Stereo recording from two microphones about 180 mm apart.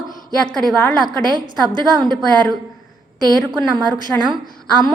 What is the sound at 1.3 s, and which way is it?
Speech, 25° right (ahead or behind).